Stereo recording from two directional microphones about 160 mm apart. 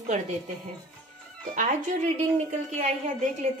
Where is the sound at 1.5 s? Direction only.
50° right (ahead or behind).